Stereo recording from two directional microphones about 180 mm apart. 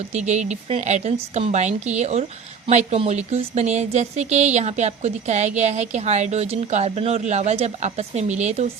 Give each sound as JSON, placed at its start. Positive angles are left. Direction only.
{"t": 0.1, "sound": "speech", "side_deg": -40}